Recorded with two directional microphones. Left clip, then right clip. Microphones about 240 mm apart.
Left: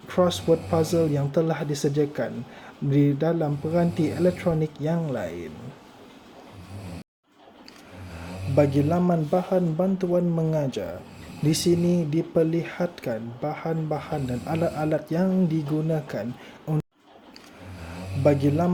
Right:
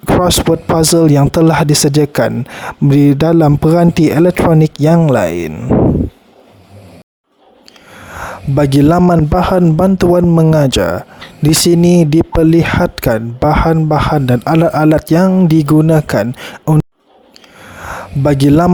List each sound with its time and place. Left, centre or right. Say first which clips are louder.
0.2 s speech: right 9 dB; right
8.2 s speech: right 8 dB; right
18.2 s speech: right 11 dB; right